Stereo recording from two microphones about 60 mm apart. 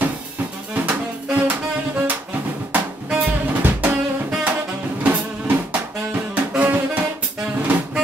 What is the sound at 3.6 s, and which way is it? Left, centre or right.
Music, right.